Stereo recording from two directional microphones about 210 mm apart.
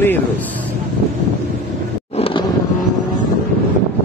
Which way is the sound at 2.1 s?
25° left (ahead or behind).